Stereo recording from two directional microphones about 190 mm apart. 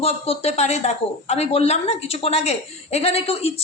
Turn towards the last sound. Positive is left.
turn(degrees=30)  # may be behind; listen again after turning